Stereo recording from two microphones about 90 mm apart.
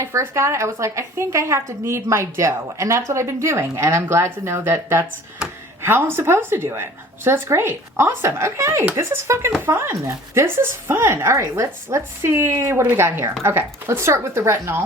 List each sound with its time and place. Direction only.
0.0 s a woman's voice: 30° right (ahead or behind)